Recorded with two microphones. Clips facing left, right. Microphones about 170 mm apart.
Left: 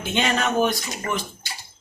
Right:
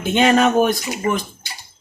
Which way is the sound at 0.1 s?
50° right (ahead or behind).